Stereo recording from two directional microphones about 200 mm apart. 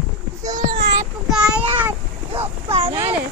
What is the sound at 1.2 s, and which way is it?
Child singing, 5° right (ahead or behind).